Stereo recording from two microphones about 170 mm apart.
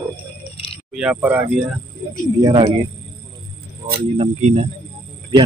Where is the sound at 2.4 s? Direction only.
30° right (ahead or behind).